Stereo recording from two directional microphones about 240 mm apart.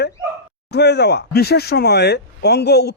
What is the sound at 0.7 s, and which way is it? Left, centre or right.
Speech, left.